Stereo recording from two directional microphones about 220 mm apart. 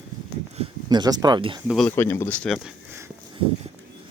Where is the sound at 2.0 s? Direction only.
10° left (ahead or behind); by 3.1 s 5° right (ahead or behind).